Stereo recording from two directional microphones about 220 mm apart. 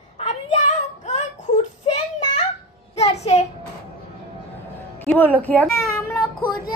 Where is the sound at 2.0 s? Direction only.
30° left (ahead or behind).